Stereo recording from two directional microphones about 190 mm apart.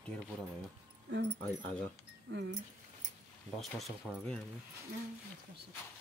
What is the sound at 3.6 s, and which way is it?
Speech, centre (ahead or behind).